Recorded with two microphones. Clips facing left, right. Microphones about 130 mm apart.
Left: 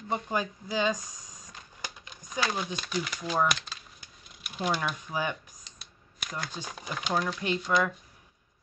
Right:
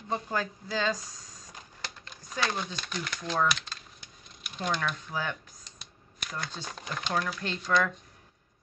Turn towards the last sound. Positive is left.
turn(degrees=10)  # may be behind; listen again after turning